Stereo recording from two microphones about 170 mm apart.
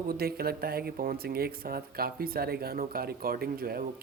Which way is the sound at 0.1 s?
65° right (ahead or behind).